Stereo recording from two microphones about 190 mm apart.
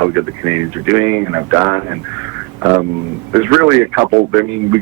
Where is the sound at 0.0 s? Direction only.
15° right (ahead or behind).